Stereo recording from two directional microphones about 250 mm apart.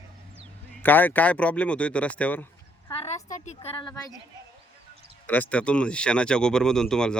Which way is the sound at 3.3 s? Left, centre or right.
Left.